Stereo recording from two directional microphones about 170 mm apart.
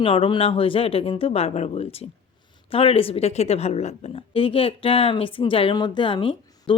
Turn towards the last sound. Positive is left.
turn(degrees=30)  # may be behind; listen again after turning